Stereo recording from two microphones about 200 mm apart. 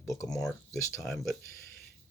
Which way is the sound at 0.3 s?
Centre (ahead or behind).